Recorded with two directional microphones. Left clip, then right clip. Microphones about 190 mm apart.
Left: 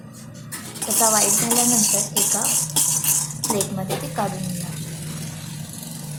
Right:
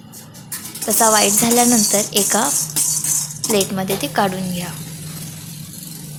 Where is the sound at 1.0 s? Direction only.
30° right (ahead or behind).